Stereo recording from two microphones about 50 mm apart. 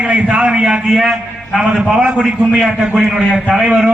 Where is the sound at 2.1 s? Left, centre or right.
Centre.